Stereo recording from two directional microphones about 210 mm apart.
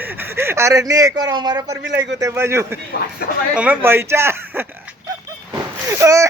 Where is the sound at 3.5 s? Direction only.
5° right (ahead or behind).